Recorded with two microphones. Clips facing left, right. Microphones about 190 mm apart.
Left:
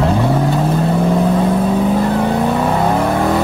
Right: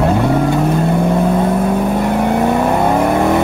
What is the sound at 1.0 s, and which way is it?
Vehicle, centre (ahead or behind).